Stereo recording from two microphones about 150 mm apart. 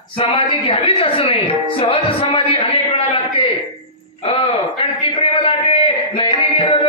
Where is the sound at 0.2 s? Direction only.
35° left (ahead or behind).